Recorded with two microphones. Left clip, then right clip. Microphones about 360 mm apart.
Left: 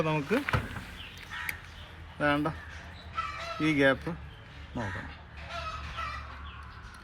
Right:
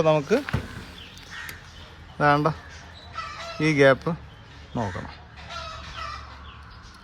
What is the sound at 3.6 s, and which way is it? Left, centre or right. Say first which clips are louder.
Chicken: right 7 dB; centre.